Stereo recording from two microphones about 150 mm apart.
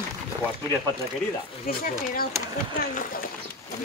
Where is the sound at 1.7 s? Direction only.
75° left (ahead or behind).